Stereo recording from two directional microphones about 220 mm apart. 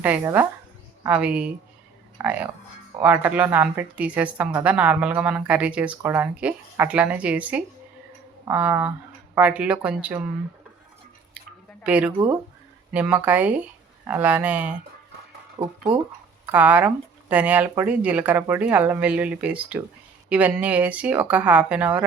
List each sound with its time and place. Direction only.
0.0 s a woman's voice: 10° right (ahead or behind)
11.8 s a woman's voice: 5° right (ahead or behind)
15.6 s speech: 20° right (ahead or behind)
16.5 s a woman's voice: 5° right (ahead or behind)